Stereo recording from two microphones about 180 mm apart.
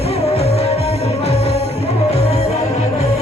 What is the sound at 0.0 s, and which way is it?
Music, 35° left (ahead or behind).